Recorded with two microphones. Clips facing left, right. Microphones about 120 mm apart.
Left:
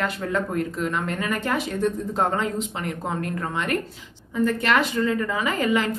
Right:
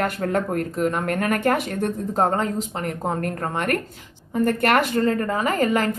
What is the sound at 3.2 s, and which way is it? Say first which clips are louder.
Speech: right 2 dB; 50° right (ahead or behind).